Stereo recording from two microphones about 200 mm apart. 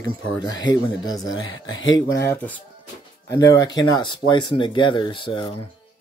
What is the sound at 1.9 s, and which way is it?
Speech, 15° left (ahead or behind).